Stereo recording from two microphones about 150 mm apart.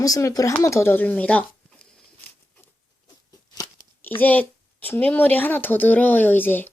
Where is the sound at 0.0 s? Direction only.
20° left (ahead or behind).